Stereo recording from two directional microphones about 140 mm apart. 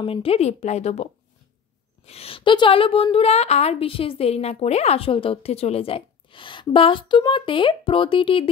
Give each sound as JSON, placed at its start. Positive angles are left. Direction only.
{"t": 0.0, "sound": "a woman's voice", "side_deg": 40}
{"t": 2.0, "sound": "a woman's voice", "side_deg": 45}